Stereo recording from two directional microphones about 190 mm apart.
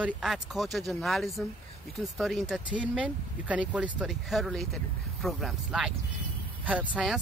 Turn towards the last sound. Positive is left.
turn(degrees=-5)  # may be behind; listen again after turning